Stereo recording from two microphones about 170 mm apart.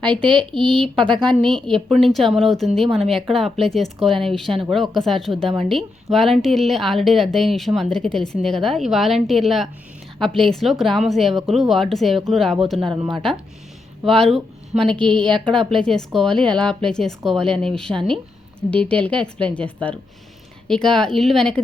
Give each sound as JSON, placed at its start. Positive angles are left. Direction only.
{"t": 0.1, "sound": "speech", "side_deg": -30}
{"t": 0.8, "sound": "a woman's voice", "side_deg": 5}
{"t": 14.0, "sound": "a woman's voice", "side_deg": 0}